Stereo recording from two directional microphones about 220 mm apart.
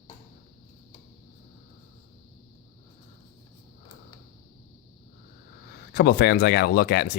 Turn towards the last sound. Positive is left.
turn(degrees=45)  # may be behind; listen again after turning